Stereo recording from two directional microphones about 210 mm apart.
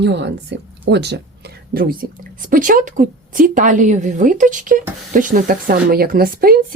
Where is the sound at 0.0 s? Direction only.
55° right (ahead or behind).